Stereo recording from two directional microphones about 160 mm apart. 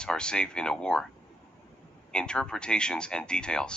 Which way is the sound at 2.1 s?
5° left (ahead or behind).